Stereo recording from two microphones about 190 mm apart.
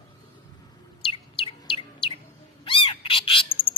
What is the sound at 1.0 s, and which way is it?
Chirp, 30° left (ahead or behind).